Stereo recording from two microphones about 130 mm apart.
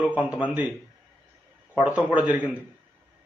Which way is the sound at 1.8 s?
10° right (ahead or behind).